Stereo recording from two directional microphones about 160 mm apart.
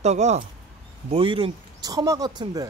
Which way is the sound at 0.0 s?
45° right (ahead or behind).